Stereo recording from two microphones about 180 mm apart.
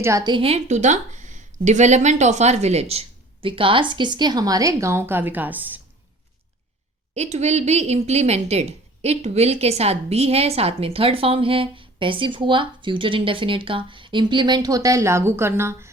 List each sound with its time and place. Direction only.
0.0 s a woman's voice: 20° right (ahead or behind)
7.1 s a woman's voice: 40° right (ahead or behind); by 15.9 s 15° right (ahead or behind)